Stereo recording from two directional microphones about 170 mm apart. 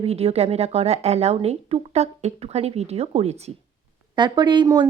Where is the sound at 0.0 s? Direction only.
35° right (ahead or behind).